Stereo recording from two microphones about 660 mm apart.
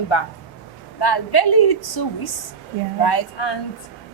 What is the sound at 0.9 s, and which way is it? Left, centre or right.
A woman's voice, left.